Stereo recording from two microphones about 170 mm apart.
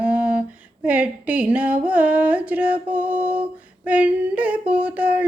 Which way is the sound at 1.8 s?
10° right (ahead or behind).